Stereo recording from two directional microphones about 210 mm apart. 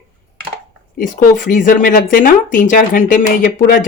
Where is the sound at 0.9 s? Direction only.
40° left (ahead or behind).